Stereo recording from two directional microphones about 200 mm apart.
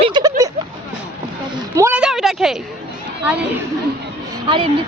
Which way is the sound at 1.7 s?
10° right (ahead or behind).